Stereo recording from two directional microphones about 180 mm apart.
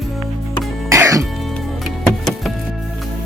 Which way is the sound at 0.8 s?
15° right (ahead or behind).